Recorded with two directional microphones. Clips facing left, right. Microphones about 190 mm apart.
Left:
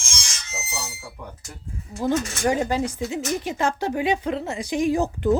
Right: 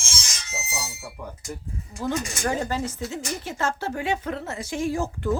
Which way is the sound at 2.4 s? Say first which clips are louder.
Left 4 dB; 15° left (ahead or behind).